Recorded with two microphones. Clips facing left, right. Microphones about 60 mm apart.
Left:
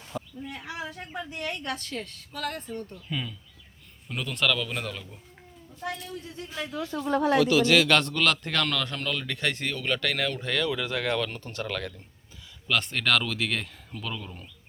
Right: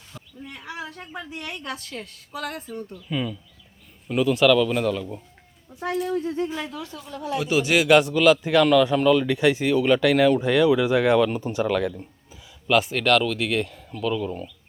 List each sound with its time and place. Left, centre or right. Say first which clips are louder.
0.4 s a woman's voice: right 1 dB; centre
5.9 s speech: right 14 dB; right
6.2 s speech: right 14 dB; right
7.0 s speech: left 9 dB; left
7.4 s a man's voice: right 1 dB; centre